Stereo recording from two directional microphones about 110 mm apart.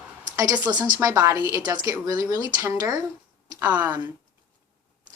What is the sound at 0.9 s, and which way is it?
A woman's voice, 30° right (ahead or behind).